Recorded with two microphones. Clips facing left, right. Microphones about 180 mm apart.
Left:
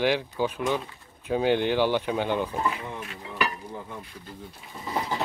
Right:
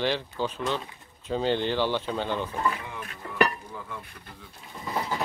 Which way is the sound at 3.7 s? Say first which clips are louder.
Left 2 dB; 35° left (ahead or behind).